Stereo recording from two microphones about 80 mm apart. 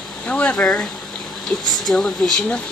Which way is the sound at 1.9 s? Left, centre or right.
Centre.